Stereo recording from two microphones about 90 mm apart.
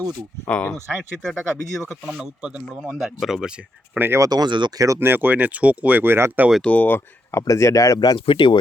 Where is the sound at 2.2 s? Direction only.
10° right (ahead or behind).